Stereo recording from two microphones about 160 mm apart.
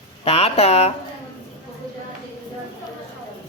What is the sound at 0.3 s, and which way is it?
Speech, 40° left (ahead or behind).